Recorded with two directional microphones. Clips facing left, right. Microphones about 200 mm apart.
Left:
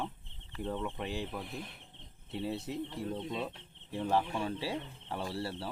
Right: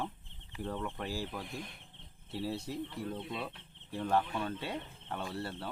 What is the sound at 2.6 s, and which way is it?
Speech, 25° left (ahead or behind).